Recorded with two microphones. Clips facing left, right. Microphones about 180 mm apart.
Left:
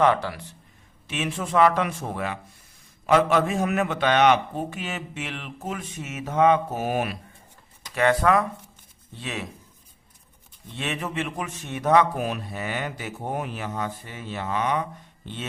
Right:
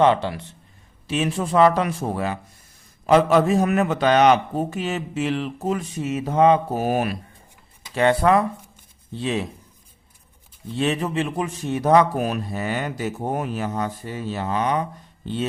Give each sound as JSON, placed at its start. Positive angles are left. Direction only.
{"t": 0.0, "sound": "speech", "side_deg": -25}
{"t": 1.0, "sound": "a man's voice", "side_deg": -35}
{"t": 7.9, "sound": "speech", "side_deg": -30}
{"t": 10.8, "sound": "a man's voice", "side_deg": -35}